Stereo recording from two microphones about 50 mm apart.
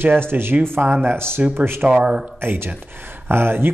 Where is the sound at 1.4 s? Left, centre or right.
Right.